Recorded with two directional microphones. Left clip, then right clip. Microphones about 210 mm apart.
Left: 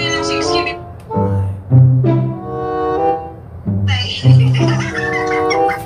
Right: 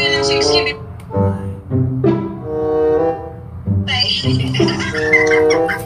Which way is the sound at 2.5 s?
Centre (ahead or behind).